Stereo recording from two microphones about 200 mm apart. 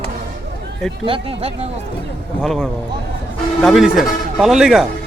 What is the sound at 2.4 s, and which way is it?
Speech, centre (ahead or behind).